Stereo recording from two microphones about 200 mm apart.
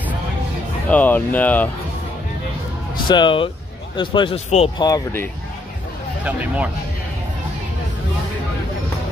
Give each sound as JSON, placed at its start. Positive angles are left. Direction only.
{"t": 0.8, "sound": "speech", "side_deg": 10}
{"t": 3.1, "sound": "a man's voice", "side_deg": 25}
{"t": 4.8, "sound": "speech", "side_deg": 15}
{"t": 6.2, "sound": "speech", "side_deg": -5}